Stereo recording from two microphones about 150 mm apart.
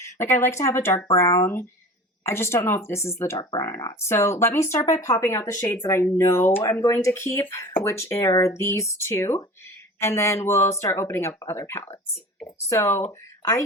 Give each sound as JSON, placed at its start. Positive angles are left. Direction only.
{"t": 0.0, "sound": "speech", "side_deg": 20}